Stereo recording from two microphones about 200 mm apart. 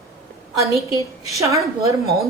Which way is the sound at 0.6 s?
15° right (ahead or behind).